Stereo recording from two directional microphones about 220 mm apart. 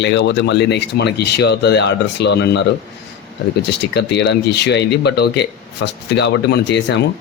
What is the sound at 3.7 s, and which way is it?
Speech, 50° left (ahead or behind).